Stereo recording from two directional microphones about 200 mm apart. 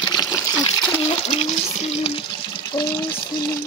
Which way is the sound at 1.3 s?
30° left (ahead or behind).